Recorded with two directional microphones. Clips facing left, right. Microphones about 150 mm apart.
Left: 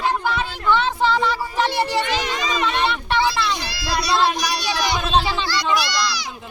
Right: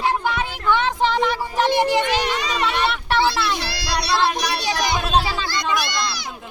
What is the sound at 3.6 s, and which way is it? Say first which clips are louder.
Speech: even; 70° right (ahead or behind).